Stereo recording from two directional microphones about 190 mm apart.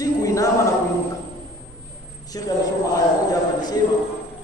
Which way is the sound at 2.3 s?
20° left (ahead or behind).